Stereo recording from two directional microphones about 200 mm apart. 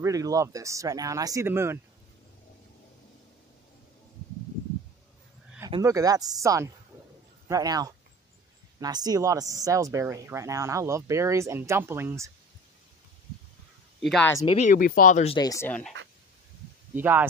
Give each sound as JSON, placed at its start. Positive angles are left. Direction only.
{"t": 0.0, "sound": "speech", "side_deg": -15}
{"t": 5.7, "sound": "speech", "side_deg": -15}
{"t": 13.9, "sound": "speech", "side_deg": 0}
{"t": 14.4, "sound": "speech", "side_deg": 30}
{"t": 14.8, "sound": "speech", "side_deg": 45}
{"t": 15.3, "sound": "speech", "side_deg": 15}
{"t": 16.9, "sound": "speech", "side_deg": -10}